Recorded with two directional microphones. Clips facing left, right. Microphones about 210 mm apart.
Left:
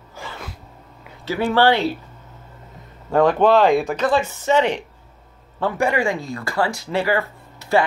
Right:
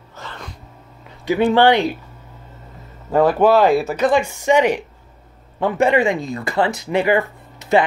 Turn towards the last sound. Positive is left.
turn(degrees=-20)  # may be behind; listen again after turning